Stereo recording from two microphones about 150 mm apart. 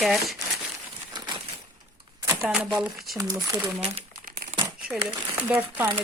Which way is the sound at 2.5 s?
5° right (ahead or behind).